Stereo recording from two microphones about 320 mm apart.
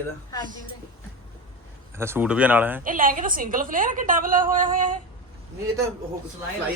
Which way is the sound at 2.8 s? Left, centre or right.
Right.